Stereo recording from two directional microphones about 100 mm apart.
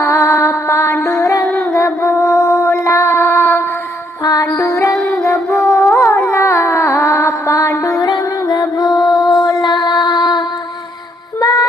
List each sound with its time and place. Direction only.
0.0 s music: 25° left (ahead or behind)
4.2 s music: 40° left (ahead or behind)
4.5 s music: 25° left (ahead or behind)
4.9 s music: 5° left (ahead or behind)
5.2 s music: 25° left (ahead or behind); by 10.4 s 45° left (ahead or behind)
11.3 s yodeling: 35° left (ahead or behind)